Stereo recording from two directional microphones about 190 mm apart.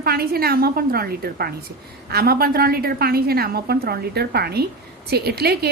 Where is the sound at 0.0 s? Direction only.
55° right (ahead or behind).